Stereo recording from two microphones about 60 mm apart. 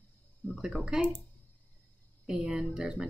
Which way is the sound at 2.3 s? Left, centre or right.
Centre.